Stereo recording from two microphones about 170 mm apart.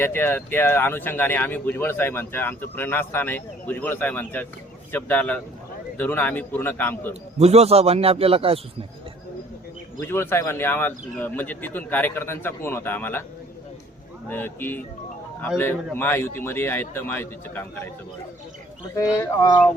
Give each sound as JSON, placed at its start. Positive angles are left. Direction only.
{"t": 0.0, "sound": "speech", "side_deg": 10}
{"t": 7.3, "sound": "a man's voice", "side_deg": -40}
{"t": 10.0, "sound": "speech", "side_deg": 15}
{"t": 14.3, "sound": "speech", "side_deg": 10}
{"t": 18.9, "sound": "speech", "side_deg": 20}